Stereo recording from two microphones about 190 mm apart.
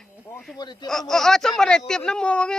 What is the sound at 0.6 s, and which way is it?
Speech, 20° left (ahead or behind).